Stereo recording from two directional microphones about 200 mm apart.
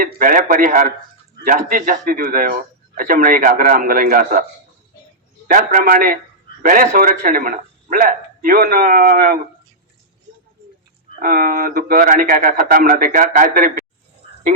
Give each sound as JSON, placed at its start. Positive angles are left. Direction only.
{"t": 0.0, "sound": "a man's voice", "side_deg": -45}
{"t": 5.5, "sound": "a man's voice", "side_deg": -45}
{"t": 11.2, "sound": "a man's voice", "side_deg": -45}